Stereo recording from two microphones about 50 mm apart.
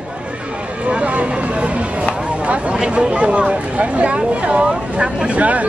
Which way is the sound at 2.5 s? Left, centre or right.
Right.